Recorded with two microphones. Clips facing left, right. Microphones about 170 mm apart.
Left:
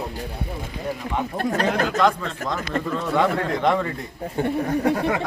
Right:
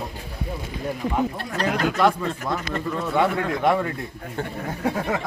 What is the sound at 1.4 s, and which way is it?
Speech, 50° left (ahead or behind).